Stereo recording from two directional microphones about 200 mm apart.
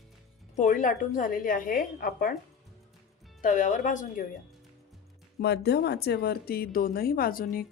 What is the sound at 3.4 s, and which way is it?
Speech, 40° left (ahead or behind).